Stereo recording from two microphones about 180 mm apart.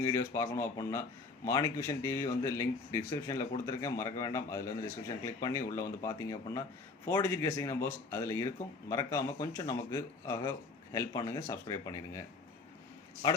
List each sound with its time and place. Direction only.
0.0 s speech: 15° left (ahead or behind)
13.2 s speech: 25° left (ahead or behind)